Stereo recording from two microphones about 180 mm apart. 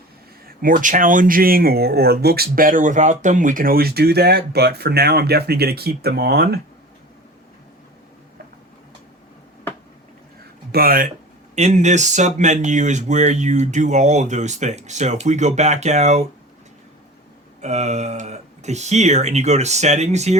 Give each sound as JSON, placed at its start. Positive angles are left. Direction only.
{"t": 0.4, "sound": "speech", "side_deg": -50}
{"t": 10.7, "sound": "speech", "side_deg": -55}
{"t": 11.5, "sound": "speech", "side_deg": -40}
{"t": 17.6, "sound": "speech", "side_deg": -40}